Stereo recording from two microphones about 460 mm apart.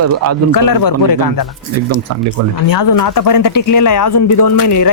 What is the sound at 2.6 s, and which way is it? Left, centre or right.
Speech, left.